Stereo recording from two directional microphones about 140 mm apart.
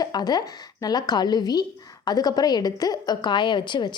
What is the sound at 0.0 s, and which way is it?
A woman's voice, 30° left (ahead or behind).